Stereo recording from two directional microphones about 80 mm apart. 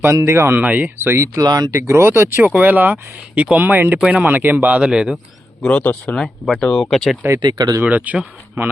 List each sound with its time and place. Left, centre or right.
0.0 s speech: right
0.6 s speech: centre; by 1.5 s right
1.5 s speech: right
1.7 s speech: right
2.4 s speech: centre
5.6 s speech: centre
7.4 s speech: right
7.8 s speech: centre